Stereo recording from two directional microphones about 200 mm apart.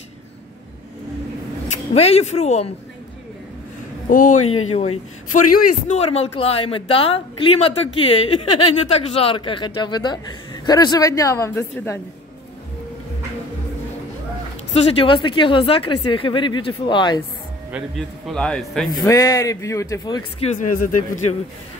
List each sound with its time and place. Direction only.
1.7 s a woman's voice: 30° left (ahead or behind)
4.1 s speech: 40° left (ahead or behind)
4.4 s speech: 90° left
4.7 s a woman's voice: 30° left (ahead or behind); by 12.0 s 15° left (ahead or behind)
14.7 s a woman's voice: 30° left (ahead or behind)
17.6 s a man's voice: 5° right (ahead or behind)
18.9 s speech: 15° left (ahead or behind)
20.3 s speech: 35° left (ahead or behind)